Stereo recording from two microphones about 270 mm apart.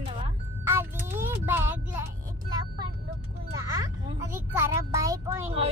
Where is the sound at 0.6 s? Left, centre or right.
Centre.